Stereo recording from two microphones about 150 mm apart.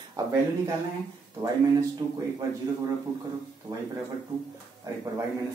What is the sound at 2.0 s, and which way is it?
Speech, 25° right (ahead or behind).